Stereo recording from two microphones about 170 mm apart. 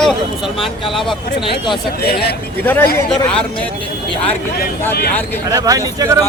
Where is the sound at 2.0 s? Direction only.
65° left (ahead or behind).